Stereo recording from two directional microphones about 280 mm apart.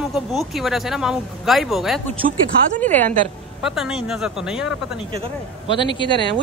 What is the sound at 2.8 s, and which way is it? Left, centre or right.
A woman's voice, centre.